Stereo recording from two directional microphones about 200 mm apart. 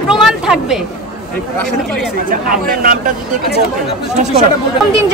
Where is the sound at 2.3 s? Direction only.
45° right (ahead or behind).